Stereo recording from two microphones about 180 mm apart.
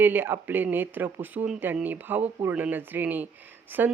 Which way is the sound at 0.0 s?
10° right (ahead or behind).